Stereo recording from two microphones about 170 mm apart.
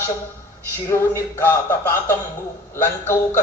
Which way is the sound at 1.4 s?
15° left (ahead or behind).